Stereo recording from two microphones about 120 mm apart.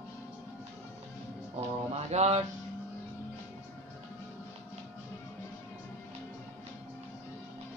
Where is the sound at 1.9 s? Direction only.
65° right (ahead or behind).